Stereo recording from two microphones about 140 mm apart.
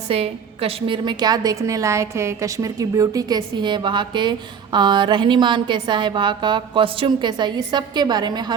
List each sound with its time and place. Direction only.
0.1 s a woman's voice: 45° right (ahead or behind)